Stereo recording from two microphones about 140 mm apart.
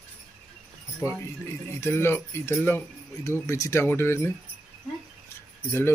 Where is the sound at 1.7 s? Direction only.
20° left (ahead or behind).